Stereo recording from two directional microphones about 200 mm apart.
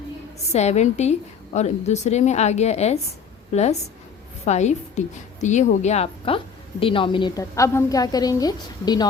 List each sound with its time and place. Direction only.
0.5 s a woman's voice: 35° left (ahead or behind)